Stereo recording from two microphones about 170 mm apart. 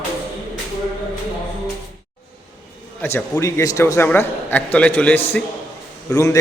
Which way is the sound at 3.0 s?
15° left (ahead or behind).